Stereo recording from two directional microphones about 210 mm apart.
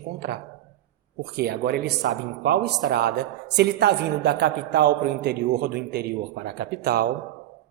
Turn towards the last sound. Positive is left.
turn(degrees=-50)  # may be behind; listen again after turning